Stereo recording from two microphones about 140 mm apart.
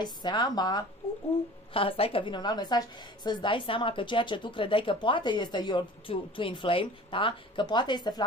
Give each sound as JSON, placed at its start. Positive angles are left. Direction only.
{"t": 0.0, "sound": "a woman's voice", "side_deg": 30}
{"t": 1.7, "sound": "a woman's voice", "side_deg": 40}